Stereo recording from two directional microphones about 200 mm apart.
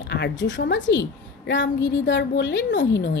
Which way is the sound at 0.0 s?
60° left (ahead or behind).